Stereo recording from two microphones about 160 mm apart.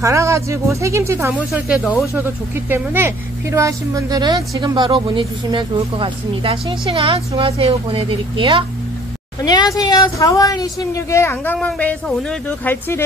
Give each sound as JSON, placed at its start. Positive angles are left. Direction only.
{"t": 0.0, "sound": "speech", "side_deg": -20}
{"t": 1.5, "sound": "a woman's voice", "side_deg": -5}
{"t": 9.4, "sound": "a woman's voice", "side_deg": 25}